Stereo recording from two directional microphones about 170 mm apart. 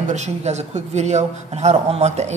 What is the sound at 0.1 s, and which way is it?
Speech, 40° right (ahead or behind).